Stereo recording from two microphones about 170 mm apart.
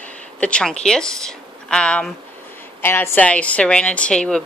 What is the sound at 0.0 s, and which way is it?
A woman's voice, 5° left (ahead or behind).